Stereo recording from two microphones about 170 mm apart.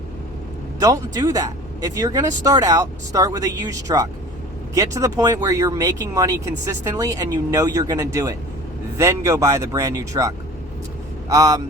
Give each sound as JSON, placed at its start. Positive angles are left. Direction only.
{"t": 0.8, "sound": "speech", "side_deg": -20}